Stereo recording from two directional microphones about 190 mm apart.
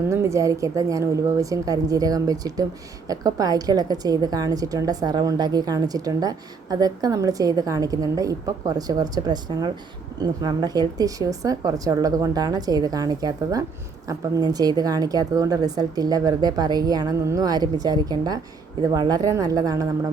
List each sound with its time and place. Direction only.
0.1 s a woman's voice: 15° right (ahead or behind)